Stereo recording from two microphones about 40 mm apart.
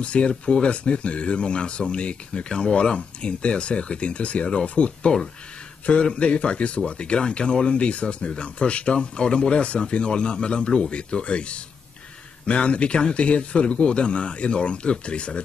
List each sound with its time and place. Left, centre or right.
0.0 s speech: left
6.1 s speech: left